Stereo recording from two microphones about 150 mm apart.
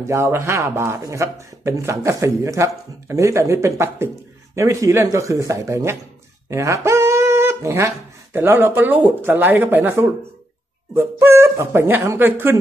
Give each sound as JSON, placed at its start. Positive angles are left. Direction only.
{"t": 0.0, "sound": "speech", "side_deg": -20}